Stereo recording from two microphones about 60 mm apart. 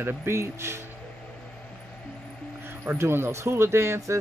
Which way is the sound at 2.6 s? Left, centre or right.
Right.